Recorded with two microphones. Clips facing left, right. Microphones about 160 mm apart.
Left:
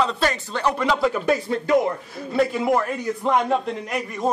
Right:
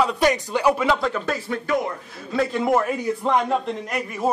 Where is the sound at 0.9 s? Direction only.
10° left (ahead or behind).